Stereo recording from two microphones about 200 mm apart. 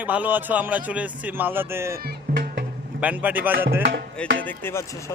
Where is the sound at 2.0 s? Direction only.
50° right (ahead or behind).